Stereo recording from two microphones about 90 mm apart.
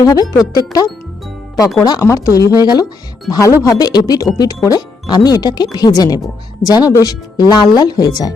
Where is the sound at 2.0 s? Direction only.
35° left (ahead or behind).